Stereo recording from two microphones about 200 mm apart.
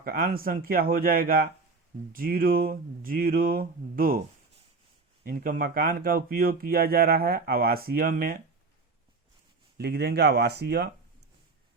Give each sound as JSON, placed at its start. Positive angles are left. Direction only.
{"t": 0.0, "sound": "speech", "side_deg": -45}
{"t": 5.2, "sound": "speech", "side_deg": -45}
{"t": 9.7, "sound": "speech", "side_deg": -55}